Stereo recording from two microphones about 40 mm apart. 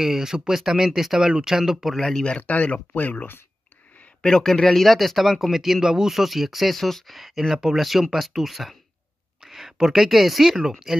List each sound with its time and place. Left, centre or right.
0.0 s speech: centre
2.0 s speech: centre
2.2 s speech: left
4.2 s speech: centre
10.9 s speech: centre